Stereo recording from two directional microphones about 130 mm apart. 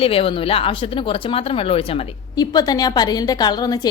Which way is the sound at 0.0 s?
45° left (ahead or behind).